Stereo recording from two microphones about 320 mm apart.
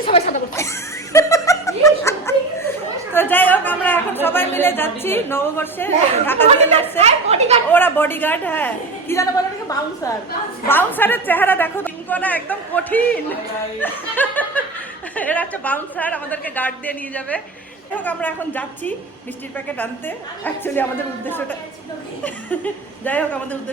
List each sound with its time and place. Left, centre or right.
0.0 s speech: centre
1.1 s laughter: centre
3.1 s speech: centre
7.0 s speech: centre
7.7 s a man's voice: centre
22.2 s a man's voice: centre